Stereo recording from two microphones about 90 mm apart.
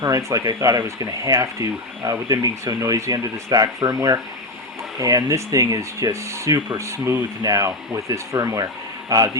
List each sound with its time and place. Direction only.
0.0 s speech: 35° right (ahead or behind)
7.4 s speech: 40° right (ahead or behind)